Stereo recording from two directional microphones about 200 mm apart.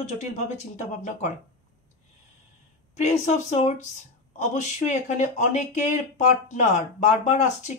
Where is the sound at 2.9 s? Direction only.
35° left (ahead or behind).